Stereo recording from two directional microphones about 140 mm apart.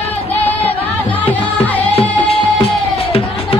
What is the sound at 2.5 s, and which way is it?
Music, 45° left (ahead or behind).